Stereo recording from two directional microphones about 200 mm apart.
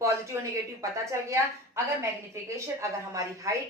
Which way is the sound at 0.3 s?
15° right (ahead or behind).